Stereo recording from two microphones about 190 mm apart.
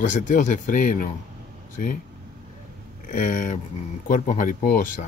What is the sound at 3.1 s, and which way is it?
Speech, 45° left (ahead or behind).